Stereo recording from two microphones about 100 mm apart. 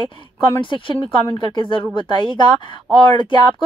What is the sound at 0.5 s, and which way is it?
Speech, 55° left (ahead or behind).